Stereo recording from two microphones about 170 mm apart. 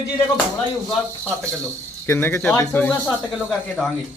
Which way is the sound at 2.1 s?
15° left (ahead or behind).